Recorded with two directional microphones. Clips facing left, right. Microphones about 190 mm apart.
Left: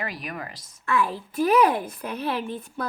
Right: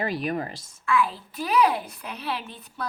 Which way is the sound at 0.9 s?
45° left (ahead or behind).